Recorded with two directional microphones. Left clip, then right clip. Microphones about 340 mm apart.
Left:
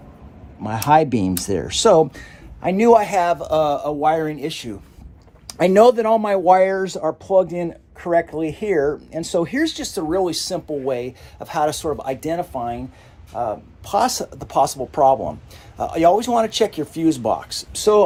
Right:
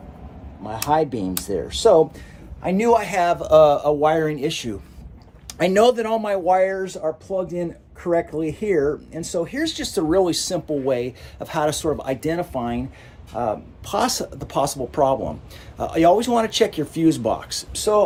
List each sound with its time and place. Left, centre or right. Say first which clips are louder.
0.6 s a man's voice: left 5 dB; left; by 4.8 s centre
5.5 s a man's voice: left 4 dB; centre
9.4 s speech: left 1 dB; left
9.8 s speech: right 2 dB; centre
17.7 s speech: left 3 dB; left